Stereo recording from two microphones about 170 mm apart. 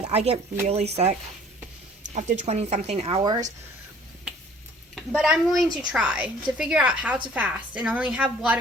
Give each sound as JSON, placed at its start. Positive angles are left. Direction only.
{"t": 0.1, "sound": "a woman's voice", "side_deg": -40}
{"t": 2.4, "sound": "a woman's voice", "side_deg": -40}
{"t": 4.9, "sound": "a woman's voice", "side_deg": -5}